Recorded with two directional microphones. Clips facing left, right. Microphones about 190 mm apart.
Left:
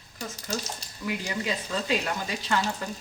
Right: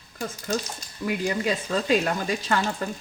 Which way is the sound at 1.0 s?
50° right (ahead or behind).